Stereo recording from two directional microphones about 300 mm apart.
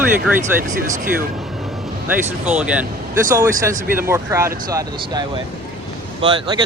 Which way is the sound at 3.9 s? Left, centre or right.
Centre.